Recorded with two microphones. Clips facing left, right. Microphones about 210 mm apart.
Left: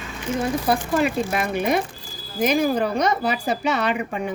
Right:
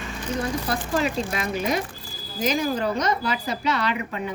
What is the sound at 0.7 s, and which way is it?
Speech, 60° left (ahead or behind).